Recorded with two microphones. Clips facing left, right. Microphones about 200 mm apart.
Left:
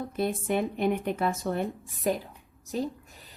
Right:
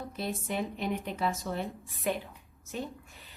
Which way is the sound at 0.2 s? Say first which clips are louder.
Left 6 dB; 55° left (ahead or behind).